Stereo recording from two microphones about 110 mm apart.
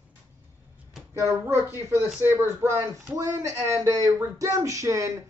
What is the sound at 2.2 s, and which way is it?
Speech, 20° right (ahead or behind).